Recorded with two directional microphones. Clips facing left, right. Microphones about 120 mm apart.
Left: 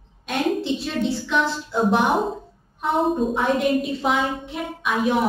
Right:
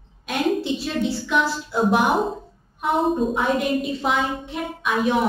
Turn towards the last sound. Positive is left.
turn(degrees=0)  # may be behind; listen again after turning